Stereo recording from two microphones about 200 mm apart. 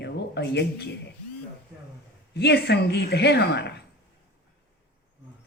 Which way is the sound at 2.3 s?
55° left (ahead or behind).